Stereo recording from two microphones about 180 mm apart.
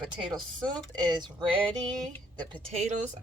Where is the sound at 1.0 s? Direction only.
25° right (ahead or behind).